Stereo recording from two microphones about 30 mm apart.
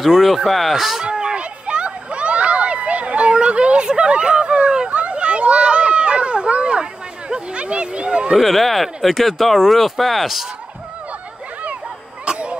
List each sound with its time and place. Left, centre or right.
0.2 s speech: centre
0.7 s speech: centre
1.3 s a sound: right
4.8 s a sound: right
6.8 s speech: right
8.4 s speech: centre
12.3 s honk: right